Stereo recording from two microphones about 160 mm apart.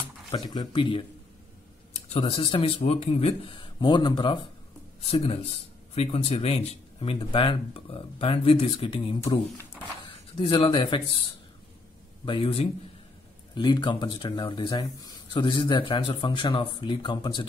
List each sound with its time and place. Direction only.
0.4 s speech: 25° left (ahead or behind)
10.3 s speech: 30° left (ahead or behind)
12.3 s speech: 35° left (ahead or behind)